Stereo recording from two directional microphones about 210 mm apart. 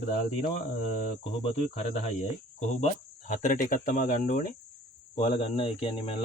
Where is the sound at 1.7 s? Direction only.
35° left (ahead or behind).